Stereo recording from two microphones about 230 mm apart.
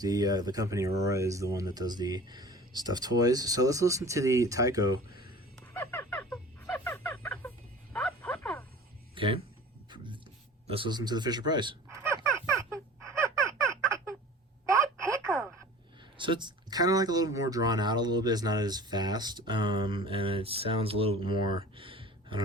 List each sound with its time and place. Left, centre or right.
0.0 s speech: centre
5.5 s music: centre
9.1 s speech: right
9.9 s a sound: right
14.9 s telephone: centre
16.1 s speech: right
21.6 s a sound: right